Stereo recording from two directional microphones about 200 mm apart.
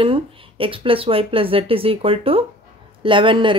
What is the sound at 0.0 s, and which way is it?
Speech, 25° right (ahead or behind).